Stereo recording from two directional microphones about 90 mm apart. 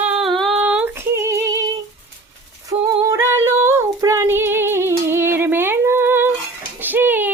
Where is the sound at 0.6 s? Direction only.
15° right (ahead or behind).